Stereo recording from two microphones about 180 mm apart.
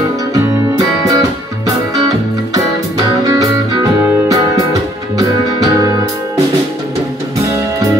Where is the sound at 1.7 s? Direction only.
20° right (ahead or behind).